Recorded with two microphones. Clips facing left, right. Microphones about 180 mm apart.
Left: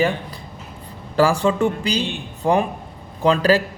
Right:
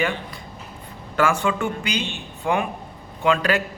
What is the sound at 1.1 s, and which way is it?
A man's voice, 35° left (ahead or behind).